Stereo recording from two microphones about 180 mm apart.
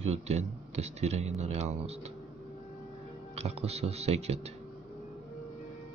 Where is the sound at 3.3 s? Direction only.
35° right (ahead or behind).